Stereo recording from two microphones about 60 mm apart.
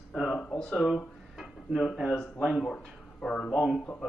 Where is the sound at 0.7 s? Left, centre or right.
Centre.